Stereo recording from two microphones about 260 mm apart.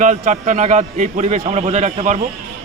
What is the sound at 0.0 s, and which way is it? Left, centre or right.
A man's voice, right.